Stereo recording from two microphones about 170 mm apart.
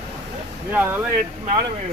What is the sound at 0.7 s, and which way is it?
Speech, 10° right (ahead or behind).